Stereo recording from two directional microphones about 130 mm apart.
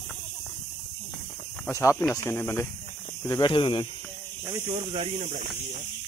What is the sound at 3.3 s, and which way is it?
Speech, 35° left (ahead or behind).